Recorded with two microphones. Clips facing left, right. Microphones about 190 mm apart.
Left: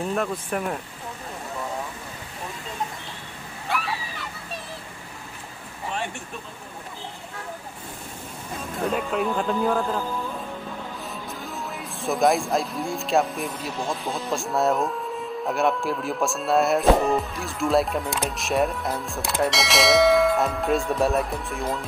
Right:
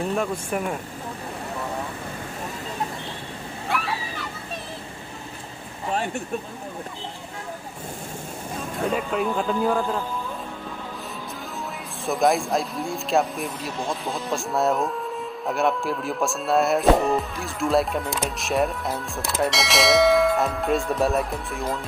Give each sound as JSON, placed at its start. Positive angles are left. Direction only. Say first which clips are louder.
{"t": 0.1, "sound": "speech", "louder": "right 1 dB", "side_deg": 0}
{"t": 3.6, "sound": "a sound", "louder": "right 1 dB", "side_deg": 0}
{"t": 8.9, "sound": "speech", "louder": "even", "side_deg": 0}
{"t": 12.1, "sound": "speech", "louder": "even", "side_deg": 0}